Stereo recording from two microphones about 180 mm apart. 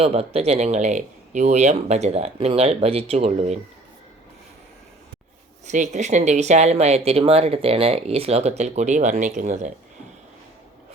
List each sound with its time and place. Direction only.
0.0 s speech: 35° right (ahead or behind)
5.6 s speech: 45° right (ahead or behind)